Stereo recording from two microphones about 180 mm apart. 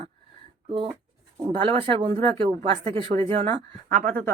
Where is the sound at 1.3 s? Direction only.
25° right (ahead or behind); by 4.2 s 45° right (ahead or behind).